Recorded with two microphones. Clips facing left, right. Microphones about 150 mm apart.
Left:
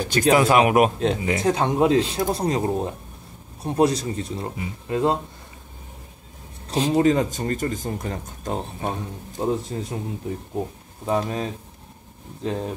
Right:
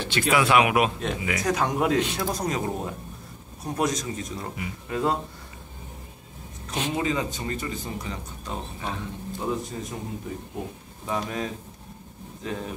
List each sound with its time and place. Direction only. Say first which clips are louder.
0.0 s speech: left 5 dB; 40° left (ahead or behind)
6.7 s speech: left 8 dB; 35° left (ahead or behind)
9.4 s speech: left 6 dB; 35° left (ahead or behind)
11.1 s speech: left 5 dB; 35° left (ahead or behind)